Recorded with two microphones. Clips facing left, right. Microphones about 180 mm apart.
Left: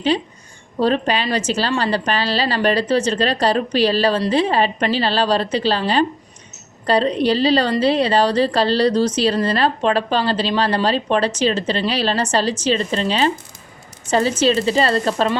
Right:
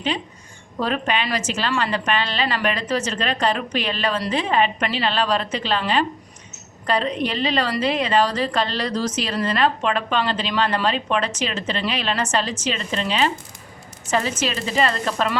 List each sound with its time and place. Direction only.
0.1 s a woman's voice: 35° left (ahead or behind)